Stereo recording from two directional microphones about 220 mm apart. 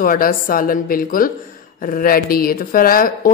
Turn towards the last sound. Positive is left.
turn(degrees=40)  # may be behind; listen again after turning